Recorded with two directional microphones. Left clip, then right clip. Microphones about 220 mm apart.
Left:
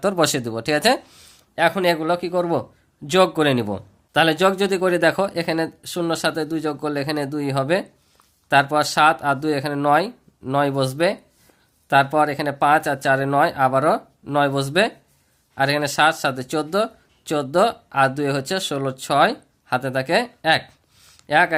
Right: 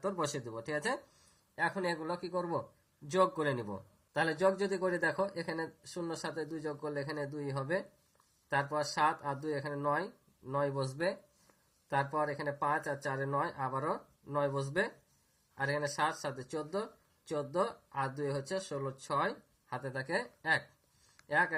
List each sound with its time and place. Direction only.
0.0 s speech: 60° left (ahead or behind)
1.5 s speech: 40° left (ahead or behind)